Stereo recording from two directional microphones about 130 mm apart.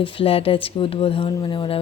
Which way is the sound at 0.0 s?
45° left (ahead or behind).